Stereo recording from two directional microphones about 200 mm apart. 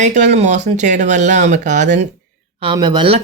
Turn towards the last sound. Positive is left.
turn(degrees=-25)  # may be behind; listen again after turning